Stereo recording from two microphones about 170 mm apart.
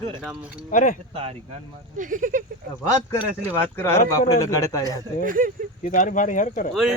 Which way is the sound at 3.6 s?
15° left (ahead or behind).